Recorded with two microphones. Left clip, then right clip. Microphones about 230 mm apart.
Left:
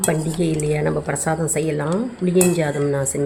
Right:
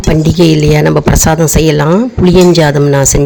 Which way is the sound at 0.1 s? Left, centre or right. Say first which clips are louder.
Right 15 dB; right.